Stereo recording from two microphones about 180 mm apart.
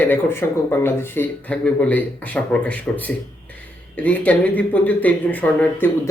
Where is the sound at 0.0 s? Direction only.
10° left (ahead or behind).